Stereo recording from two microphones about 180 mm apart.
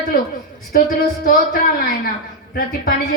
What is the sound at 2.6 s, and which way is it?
Speech, 55° left (ahead or behind).